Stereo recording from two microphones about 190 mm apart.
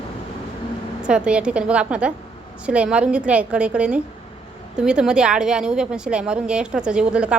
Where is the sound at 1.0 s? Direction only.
5° right (ahead or behind).